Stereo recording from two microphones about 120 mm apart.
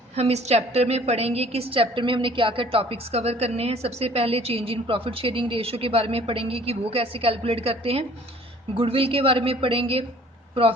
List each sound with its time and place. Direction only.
0.2 s a woman's voice: 65° right (ahead or behind)